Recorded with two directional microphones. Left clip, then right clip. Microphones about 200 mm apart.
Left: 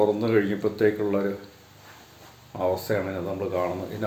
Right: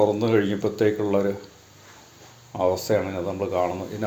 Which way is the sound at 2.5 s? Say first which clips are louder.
Right 4 dB; 15° right (ahead or behind).